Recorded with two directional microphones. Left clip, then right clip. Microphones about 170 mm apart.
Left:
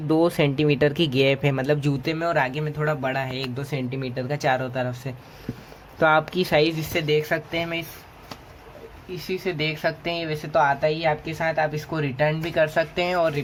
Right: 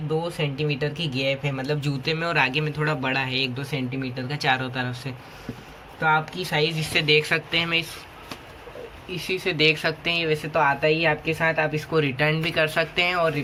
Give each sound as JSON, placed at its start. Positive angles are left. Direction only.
{"t": 0.1, "sound": "speech", "side_deg": 65}
{"t": 6.0, "sound": "speech", "side_deg": 55}
{"t": 6.9, "sound": "speech", "side_deg": 35}
{"t": 9.1, "sound": "speech", "side_deg": 45}
{"t": 11.9, "sound": "speech", "side_deg": 40}